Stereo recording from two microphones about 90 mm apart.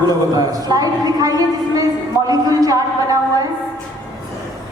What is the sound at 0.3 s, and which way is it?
A woman's voice, 45° right (ahead or behind).